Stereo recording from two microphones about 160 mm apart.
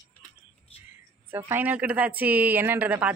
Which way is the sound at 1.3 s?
10° right (ahead or behind).